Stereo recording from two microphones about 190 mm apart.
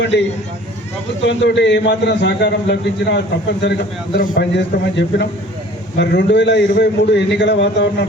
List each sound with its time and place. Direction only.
0.0 s a man's voice: 65° left (ahead or behind)
1.3 s a man's voice: 65° left (ahead or behind)